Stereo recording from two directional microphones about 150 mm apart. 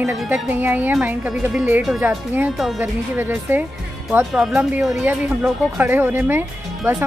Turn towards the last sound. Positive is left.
turn(degrees=-15)  # may be behind; listen again after turning